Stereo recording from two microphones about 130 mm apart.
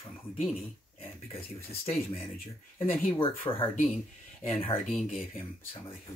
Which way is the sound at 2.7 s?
50° left (ahead or behind).